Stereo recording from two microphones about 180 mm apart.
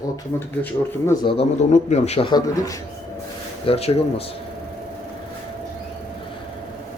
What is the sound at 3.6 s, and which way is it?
Speech, 35° left (ahead or behind).